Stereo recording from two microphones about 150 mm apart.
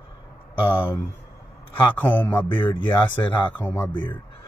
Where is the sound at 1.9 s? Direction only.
10° left (ahead or behind).